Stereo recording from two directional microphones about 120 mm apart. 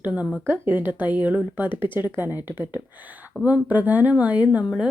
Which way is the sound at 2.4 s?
15° right (ahead or behind).